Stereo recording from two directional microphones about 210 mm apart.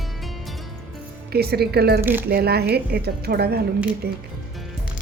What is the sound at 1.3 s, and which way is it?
Speech, 50° right (ahead or behind).